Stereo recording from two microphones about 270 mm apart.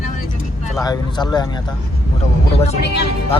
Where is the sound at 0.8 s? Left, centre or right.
Centre.